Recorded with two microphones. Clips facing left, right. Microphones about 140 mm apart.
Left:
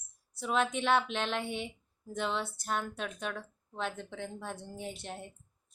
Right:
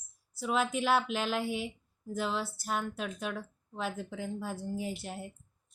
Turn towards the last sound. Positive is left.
turn(degrees=-5)  # may be behind; listen again after turning